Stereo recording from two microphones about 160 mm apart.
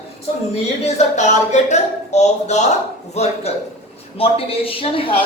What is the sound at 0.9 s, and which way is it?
A man's voice, 45° left (ahead or behind).